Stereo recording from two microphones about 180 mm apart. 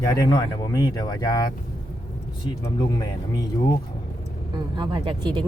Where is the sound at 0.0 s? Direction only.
20° left (ahead or behind).